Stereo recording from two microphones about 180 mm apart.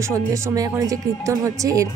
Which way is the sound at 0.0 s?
15° right (ahead or behind).